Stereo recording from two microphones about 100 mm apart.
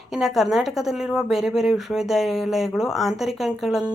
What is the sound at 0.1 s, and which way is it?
A woman's voice, centre (ahead or behind).